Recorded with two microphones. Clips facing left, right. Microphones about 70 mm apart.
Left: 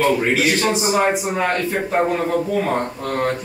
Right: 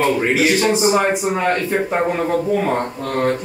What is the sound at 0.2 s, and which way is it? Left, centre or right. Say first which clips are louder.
Speech: right 2 dB; centre.